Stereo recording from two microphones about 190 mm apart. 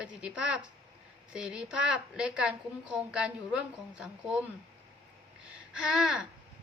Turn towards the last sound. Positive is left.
turn(degrees=-5)  # may be behind; listen again after turning